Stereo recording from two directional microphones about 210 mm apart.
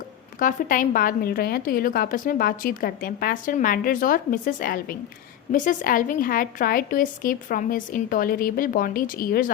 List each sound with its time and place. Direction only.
0.3 s a woman's voice: 40° left (ahead or behind)